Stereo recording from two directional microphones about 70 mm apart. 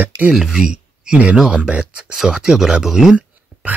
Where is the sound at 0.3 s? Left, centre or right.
Centre.